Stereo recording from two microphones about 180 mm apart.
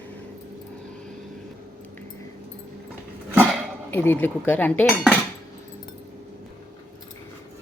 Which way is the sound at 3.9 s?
10° left (ahead or behind).